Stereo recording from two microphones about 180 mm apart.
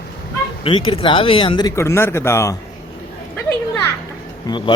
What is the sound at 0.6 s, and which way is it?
Speech, 30° left (ahead or behind).